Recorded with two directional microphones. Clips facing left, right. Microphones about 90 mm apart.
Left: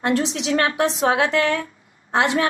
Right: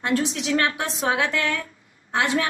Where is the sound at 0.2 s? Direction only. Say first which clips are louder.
Left 2 dB; 25° left (ahead or behind).